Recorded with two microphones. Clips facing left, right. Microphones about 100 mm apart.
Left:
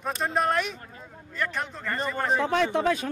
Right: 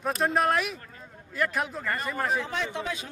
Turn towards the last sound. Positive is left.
turn(degrees=55)  # may be behind; listen again after turning